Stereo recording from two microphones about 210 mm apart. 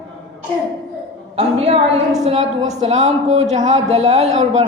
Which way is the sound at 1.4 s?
25° right (ahead or behind).